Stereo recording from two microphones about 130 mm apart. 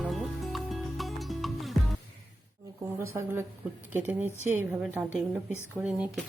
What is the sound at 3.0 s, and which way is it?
Speech, 20° right (ahead or behind).